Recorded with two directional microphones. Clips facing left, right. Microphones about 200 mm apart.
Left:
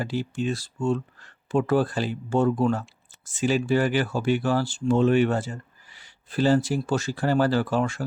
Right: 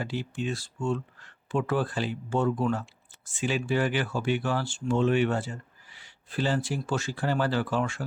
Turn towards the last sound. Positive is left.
turn(degrees=40)  # may be behind; listen again after turning